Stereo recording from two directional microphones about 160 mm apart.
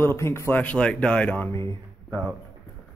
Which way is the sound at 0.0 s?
15° left (ahead or behind).